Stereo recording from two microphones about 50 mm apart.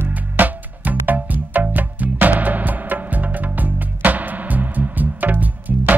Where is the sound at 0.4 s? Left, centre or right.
Right.